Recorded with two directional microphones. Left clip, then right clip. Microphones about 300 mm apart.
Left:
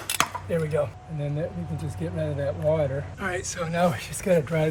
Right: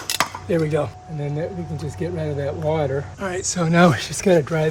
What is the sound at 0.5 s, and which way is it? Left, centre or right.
Speech, right.